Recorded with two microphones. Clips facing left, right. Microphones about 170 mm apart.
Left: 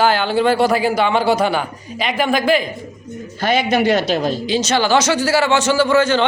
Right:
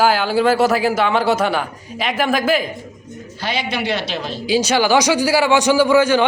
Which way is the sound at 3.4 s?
50° left (ahead or behind).